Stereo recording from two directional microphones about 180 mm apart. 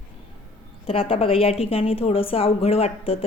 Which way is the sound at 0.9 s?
30° left (ahead or behind).